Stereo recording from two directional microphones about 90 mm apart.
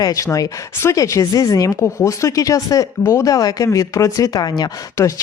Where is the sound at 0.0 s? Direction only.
40° left (ahead or behind).